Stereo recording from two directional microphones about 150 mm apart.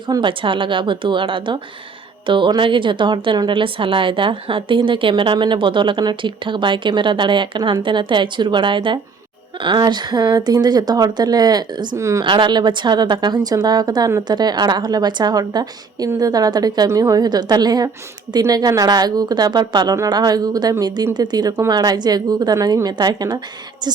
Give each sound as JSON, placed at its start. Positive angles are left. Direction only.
{"t": 0.1, "sound": "a woman's voice", "side_deg": -35}
{"t": 12.2, "sound": "a woman's voice", "side_deg": -30}